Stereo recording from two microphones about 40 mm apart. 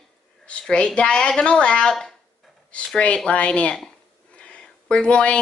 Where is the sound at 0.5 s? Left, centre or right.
Left.